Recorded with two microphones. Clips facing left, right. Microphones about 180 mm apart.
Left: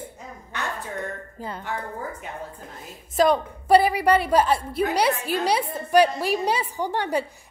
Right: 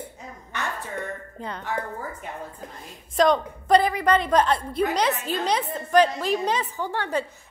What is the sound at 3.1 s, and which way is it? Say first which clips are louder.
A woman's voice: even; 5° left (ahead or behind).